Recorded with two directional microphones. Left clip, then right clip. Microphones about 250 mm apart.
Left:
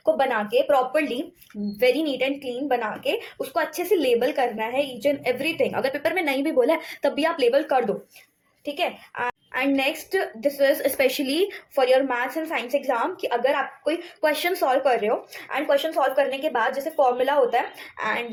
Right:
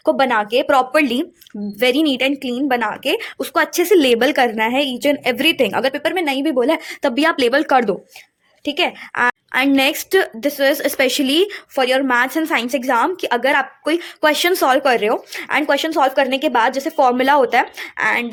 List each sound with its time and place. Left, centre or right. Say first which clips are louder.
0.0 s speech: right 6 dB; right